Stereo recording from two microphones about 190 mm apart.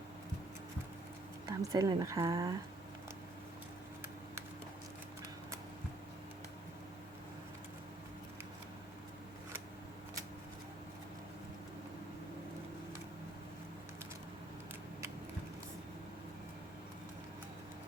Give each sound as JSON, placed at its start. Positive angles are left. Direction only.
{"t": 1.5, "sound": "speech", "side_deg": -20}